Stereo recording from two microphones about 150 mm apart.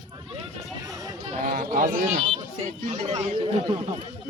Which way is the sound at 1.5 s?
65° right (ahead or behind).